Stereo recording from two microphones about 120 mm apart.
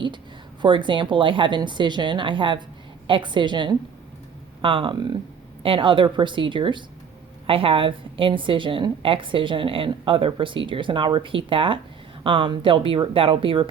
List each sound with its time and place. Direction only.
0.6 s a woman's voice: 40° right (ahead or behind)